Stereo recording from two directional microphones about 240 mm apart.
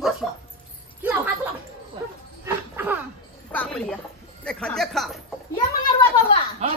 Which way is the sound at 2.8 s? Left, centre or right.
Centre.